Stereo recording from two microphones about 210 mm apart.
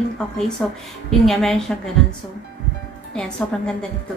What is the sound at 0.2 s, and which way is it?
A woman's voice, 5° left (ahead or behind).